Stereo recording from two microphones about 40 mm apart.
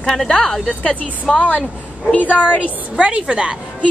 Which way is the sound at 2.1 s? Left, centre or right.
Left.